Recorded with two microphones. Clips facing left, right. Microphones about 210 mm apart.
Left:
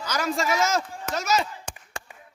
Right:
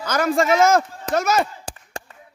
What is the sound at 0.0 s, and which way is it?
Speech, 55° right (ahead or behind).